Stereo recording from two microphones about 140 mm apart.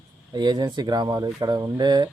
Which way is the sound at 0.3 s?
30° right (ahead or behind).